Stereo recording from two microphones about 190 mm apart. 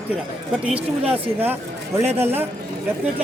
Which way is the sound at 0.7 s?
10° right (ahead or behind).